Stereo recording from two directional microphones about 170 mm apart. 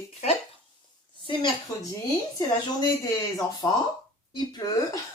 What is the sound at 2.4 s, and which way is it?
A woman's voice, 25° left (ahead or behind).